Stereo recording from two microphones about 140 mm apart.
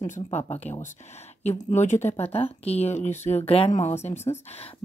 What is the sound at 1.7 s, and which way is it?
Speech, 55° left (ahead or behind).